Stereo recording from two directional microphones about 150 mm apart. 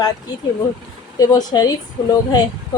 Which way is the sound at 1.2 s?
25° left (ahead or behind).